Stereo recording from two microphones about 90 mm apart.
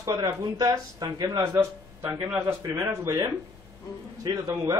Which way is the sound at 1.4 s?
30° right (ahead or behind).